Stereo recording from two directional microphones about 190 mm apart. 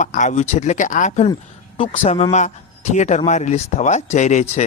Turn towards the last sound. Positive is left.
turn(degrees=35)  # may be behind; listen again after turning